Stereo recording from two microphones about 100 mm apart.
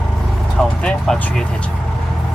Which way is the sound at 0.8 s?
5° left (ahead or behind).